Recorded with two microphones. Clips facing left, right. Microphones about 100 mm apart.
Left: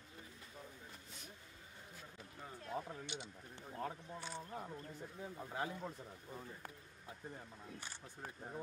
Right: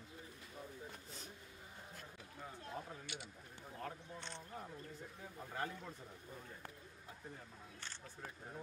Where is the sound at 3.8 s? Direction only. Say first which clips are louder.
Left 3 dB; 5° left (ahead or behind).